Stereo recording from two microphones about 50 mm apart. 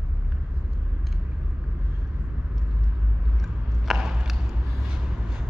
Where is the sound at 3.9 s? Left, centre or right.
Centre.